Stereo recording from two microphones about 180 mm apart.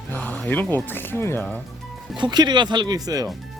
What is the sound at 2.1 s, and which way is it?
Speech, 25° right (ahead or behind).